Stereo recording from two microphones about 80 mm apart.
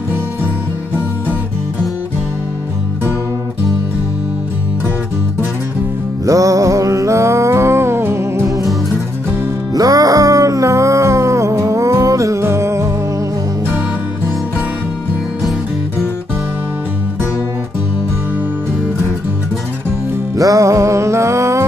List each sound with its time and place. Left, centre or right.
6.2 s music: right
9.8 s music: right
20.3 s music: right